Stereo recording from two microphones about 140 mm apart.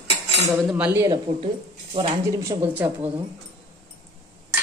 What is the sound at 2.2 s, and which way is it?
Speech, 20° right (ahead or behind).